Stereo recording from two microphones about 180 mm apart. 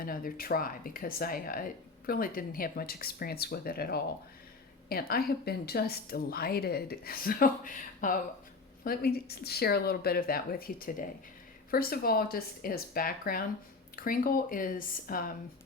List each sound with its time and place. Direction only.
0.0 s a woman's voice: 50° left (ahead or behind)